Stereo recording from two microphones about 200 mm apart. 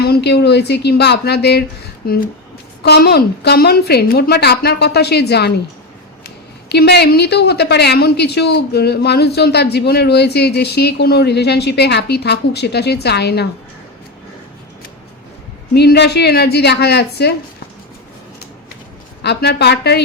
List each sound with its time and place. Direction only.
0.0 s a woman's voice: 55° left (ahead or behind)
15.7 s speech: 55° left (ahead or behind)
19.2 s speech: 55° left (ahead or behind)